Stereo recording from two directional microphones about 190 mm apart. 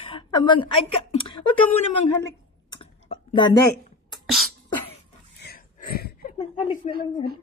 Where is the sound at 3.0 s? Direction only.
25° left (ahead or behind).